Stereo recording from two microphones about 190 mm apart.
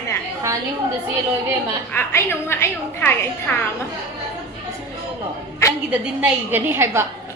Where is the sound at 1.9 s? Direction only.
10° left (ahead or behind).